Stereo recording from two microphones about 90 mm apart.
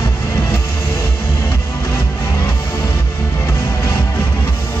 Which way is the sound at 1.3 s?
20° left (ahead or behind).